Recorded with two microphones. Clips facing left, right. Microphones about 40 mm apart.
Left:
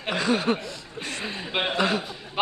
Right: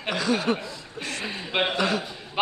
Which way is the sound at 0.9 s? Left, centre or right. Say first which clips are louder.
Right 1 dB; left.